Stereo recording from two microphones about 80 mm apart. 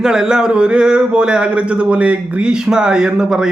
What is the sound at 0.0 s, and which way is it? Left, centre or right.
Speech, centre.